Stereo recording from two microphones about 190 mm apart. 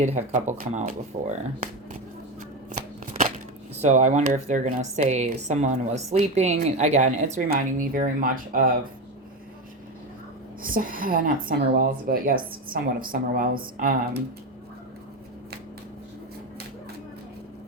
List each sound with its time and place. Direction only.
0.0 s speech: 35° right (ahead or behind)
2.6 s shuffling cards: 40° right (ahead or behind)
3.8 s a woman's voice: 40° right (ahead or behind)
10.6 s a woman's voice: 45° right (ahead or behind)